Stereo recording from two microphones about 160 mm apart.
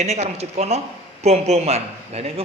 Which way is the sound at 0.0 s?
45° right (ahead or behind).